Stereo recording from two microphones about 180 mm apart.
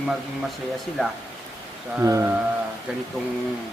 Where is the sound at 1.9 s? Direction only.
15° right (ahead or behind).